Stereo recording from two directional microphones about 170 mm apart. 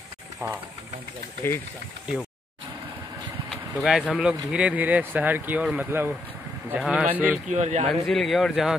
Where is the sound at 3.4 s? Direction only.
Centre (ahead or behind).